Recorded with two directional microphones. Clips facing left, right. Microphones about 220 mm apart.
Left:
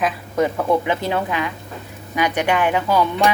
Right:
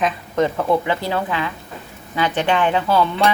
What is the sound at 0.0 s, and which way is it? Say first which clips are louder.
Speech: right 1 dB; 5° left (ahead or behind).